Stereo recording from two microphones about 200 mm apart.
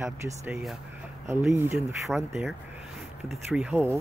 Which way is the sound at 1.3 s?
10° right (ahead or behind).